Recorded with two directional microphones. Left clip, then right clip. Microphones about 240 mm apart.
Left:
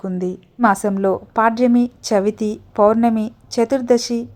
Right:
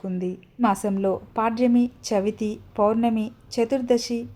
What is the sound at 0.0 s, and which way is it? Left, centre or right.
A woman's voice, left.